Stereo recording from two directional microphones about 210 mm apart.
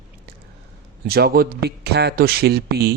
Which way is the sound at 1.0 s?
45° right (ahead or behind).